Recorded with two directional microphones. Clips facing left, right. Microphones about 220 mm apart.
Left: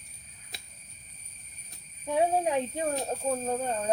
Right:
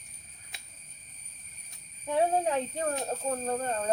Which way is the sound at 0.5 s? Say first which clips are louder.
Left 4 dB; 40° left (ahead or behind).